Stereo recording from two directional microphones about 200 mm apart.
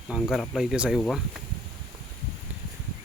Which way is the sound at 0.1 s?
Centre (ahead or behind).